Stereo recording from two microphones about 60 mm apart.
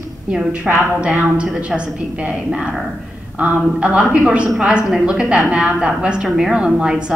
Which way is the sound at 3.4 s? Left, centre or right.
Right.